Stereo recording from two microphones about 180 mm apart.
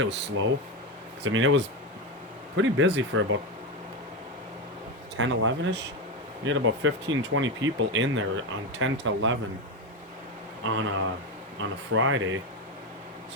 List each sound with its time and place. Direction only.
0.0 s speech: 80° right
5.1 s speech: 90° right
10.6 s speech: 90° right